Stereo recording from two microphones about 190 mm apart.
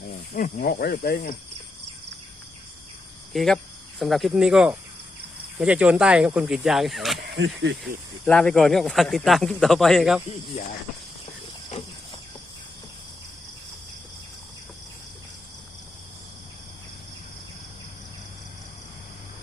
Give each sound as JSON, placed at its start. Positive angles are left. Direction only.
{"t": 0.3, "sound": "cricket", "side_deg": 45}
{"t": 3.3, "sound": "speech", "side_deg": 0}
{"t": 7.3, "sound": "speech", "side_deg": -70}
{"t": 8.2, "sound": "speech", "side_deg": 5}